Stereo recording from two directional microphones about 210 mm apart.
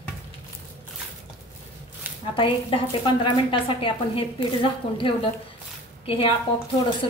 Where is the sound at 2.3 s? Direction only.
25° left (ahead or behind).